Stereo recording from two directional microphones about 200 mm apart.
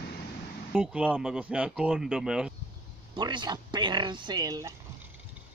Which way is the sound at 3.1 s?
25° right (ahead or behind).